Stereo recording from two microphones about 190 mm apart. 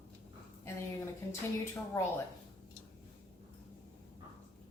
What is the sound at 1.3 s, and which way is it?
Speech, 15° left (ahead or behind).